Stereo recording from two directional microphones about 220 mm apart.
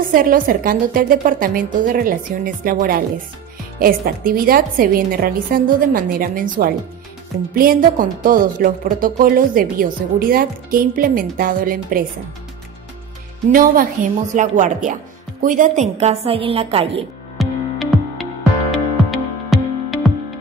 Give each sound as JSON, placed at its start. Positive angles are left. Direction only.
{"t": 0.1, "sound": "a woman's voice", "side_deg": -40}
{"t": 13.5, "sound": "a woman's voice", "side_deg": -40}
{"t": 17.4, "sound": "music", "side_deg": 0}